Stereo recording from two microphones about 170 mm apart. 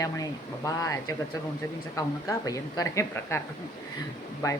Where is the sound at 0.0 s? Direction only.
20° left (ahead or behind).